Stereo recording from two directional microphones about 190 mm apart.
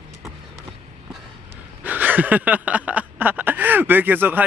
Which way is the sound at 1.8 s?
10° right (ahead or behind).